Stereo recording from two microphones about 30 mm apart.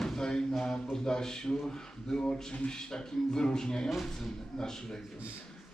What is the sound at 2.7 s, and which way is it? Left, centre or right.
Speech, left.